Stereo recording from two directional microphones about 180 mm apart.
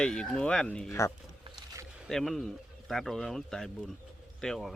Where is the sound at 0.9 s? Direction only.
15° left (ahead or behind).